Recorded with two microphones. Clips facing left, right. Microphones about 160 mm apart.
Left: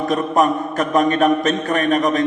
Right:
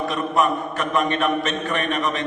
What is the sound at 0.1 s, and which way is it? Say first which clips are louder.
A man's voice: left 5 dB; 40° left (ahead or behind).